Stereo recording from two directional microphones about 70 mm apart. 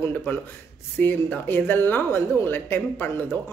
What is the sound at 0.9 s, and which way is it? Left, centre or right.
A woman's voice, left.